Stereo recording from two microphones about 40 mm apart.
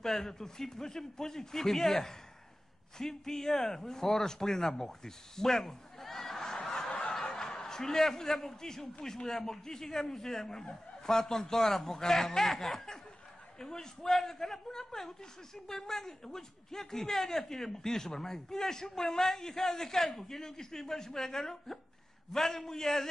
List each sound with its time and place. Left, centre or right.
0.0 s a man's voice: centre
6.2 s snicker: centre
6.5 s fowl: centre
6.9 s snicker: left
7.2 s a man's voice: centre